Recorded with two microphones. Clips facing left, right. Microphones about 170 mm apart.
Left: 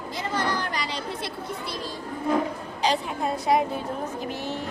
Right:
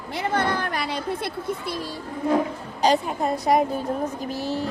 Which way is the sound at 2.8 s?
45° right (ahead or behind).